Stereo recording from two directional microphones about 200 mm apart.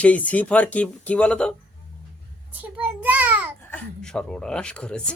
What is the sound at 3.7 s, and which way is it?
Speech, 5° left (ahead or behind).